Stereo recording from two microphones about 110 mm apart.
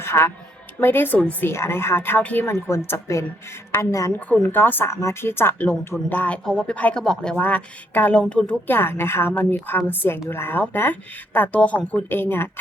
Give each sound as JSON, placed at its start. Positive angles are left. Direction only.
{"t": 0.0, "sound": "a woman's voice", "side_deg": 20}
{"t": 4.5, "sound": "a woman's voice", "side_deg": 20}